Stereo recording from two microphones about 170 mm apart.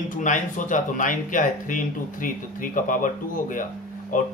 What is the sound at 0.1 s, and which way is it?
Speech, 50° left (ahead or behind).